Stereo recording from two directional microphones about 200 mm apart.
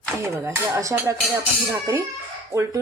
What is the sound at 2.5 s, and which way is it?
Speech, 15° right (ahead or behind).